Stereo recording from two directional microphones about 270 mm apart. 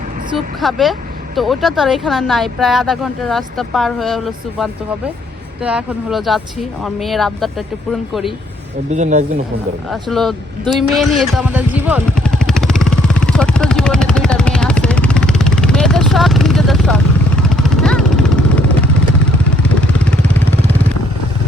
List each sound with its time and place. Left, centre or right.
0.6 s speech: centre
8.9 s speech: right
9.9 s speech: centre
10.7 s a sound: centre
17.5 s vehicle: centre